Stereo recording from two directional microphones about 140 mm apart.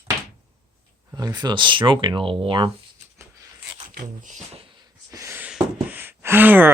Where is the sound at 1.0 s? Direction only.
25° right (ahead or behind).